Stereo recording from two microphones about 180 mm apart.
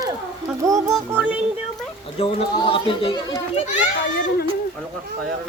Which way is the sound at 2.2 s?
30° left (ahead or behind).